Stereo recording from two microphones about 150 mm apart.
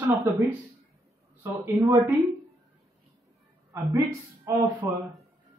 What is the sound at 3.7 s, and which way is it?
Speech, 20° right (ahead or behind).